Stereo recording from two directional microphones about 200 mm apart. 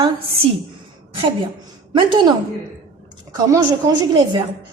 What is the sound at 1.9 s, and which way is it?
Speech, 25° right (ahead or behind).